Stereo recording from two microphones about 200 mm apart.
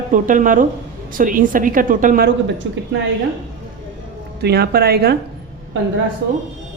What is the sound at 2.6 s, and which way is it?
Speech, 65° right (ahead or behind).